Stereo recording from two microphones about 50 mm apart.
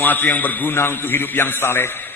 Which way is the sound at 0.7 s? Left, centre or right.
Left.